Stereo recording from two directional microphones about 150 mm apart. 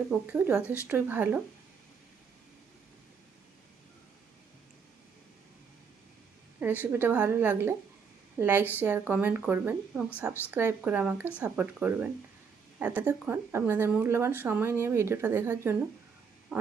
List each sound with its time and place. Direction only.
0.1 s speech: 10° right (ahead or behind)
6.6 s speech: 15° right (ahead or behind)
16.5 s frog: centre (ahead or behind)